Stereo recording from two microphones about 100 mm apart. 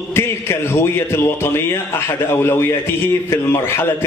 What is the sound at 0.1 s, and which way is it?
A man's voice, 25° left (ahead or behind).